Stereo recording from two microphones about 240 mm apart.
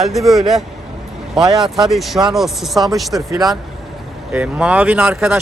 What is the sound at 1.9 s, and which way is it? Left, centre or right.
Speech, centre.